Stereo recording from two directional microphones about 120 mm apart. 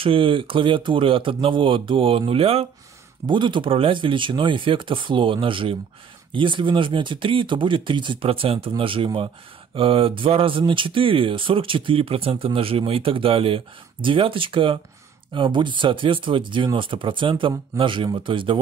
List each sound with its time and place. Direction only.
0.0 s speech: 50° right (ahead or behind)
3.3 s speech: 40° right (ahead or behind)